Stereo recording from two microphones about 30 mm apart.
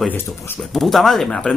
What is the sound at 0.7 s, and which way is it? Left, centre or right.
Speech, centre.